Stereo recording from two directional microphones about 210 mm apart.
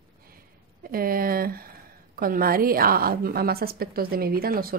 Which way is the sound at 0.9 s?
45° right (ahead or behind).